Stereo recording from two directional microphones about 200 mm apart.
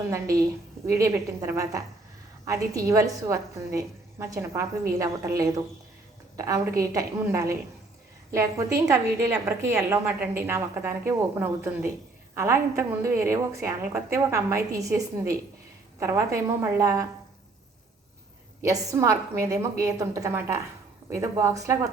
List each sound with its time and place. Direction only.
0.1 s a woman's voice: 15° right (ahead or behind)
18.6 s a woman's voice: 15° right (ahead or behind)